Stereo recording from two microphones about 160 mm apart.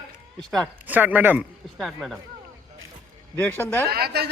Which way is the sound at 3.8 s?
75° right (ahead or behind).